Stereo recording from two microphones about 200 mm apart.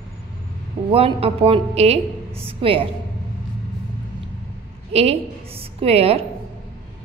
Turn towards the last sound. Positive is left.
turn(degrees=-30)  # may be behind; listen again after turning